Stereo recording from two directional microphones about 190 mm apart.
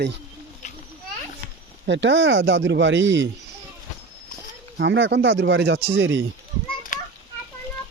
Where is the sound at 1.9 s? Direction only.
70° right (ahead or behind).